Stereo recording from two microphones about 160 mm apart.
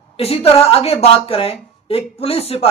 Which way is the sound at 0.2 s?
40° left (ahead or behind).